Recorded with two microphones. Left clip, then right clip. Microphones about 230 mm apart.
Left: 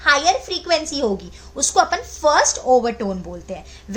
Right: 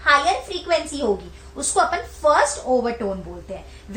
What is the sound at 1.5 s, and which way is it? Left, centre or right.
Speech, left.